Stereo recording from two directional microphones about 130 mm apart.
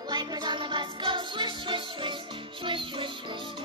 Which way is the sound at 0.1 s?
30° right (ahead or behind).